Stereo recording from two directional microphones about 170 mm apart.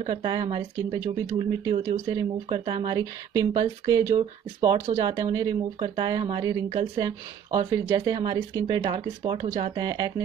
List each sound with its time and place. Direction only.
0.0 s speech: 30° right (ahead or behind)